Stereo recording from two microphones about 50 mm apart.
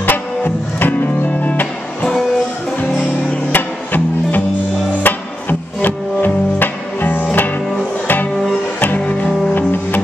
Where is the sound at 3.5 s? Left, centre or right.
Left.